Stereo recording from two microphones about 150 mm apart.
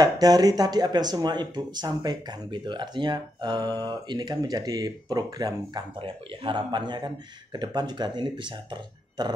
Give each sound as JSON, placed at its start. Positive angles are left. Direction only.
{"t": 0.0, "sound": "speech", "side_deg": -25}